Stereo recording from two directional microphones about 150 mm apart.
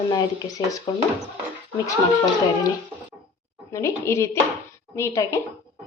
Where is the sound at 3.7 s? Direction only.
20° left (ahead or behind).